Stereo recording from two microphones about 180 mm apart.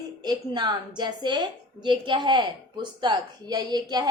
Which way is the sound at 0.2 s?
25° right (ahead or behind).